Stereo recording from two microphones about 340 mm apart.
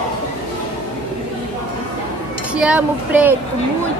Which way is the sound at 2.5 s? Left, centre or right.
Centre.